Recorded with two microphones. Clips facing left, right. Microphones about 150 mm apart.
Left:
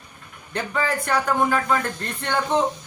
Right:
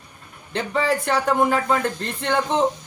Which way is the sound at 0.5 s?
25° right (ahead or behind).